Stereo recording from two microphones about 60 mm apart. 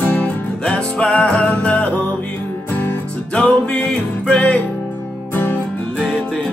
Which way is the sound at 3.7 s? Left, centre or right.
Centre.